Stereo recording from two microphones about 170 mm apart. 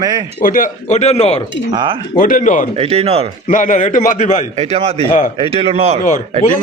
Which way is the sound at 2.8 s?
35° right (ahead or behind).